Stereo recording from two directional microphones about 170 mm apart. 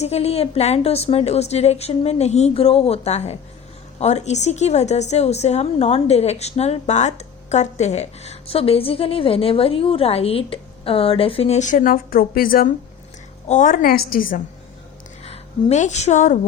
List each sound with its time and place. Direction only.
0.0 s a woman's voice: 40° left (ahead or behind); by 12.7 s 60° left (ahead or behind)
13.5 s a woman's voice: 50° left (ahead or behind)
15.2 s a woman's voice: 40° left (ahead or behind)